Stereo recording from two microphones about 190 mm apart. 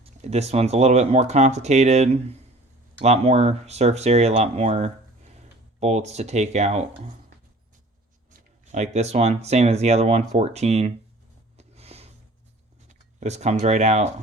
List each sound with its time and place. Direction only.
0.0 s speech: 35° right (ahead or behind)
8.3 s speech: 40° right (ahead or behind)
11.5 s a sound: 35° right (ahead or behind)
12.9 s speech: 35° right (ahead or behind)